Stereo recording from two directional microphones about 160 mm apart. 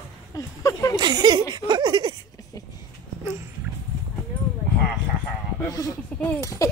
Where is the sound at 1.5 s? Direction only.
25° right (ahead or behind).